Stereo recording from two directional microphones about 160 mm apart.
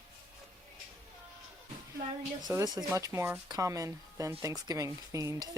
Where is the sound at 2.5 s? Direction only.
15° right (ahead or behind).